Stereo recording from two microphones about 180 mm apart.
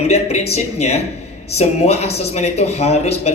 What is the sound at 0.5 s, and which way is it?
A man's voice, 35° left (ahead or behind).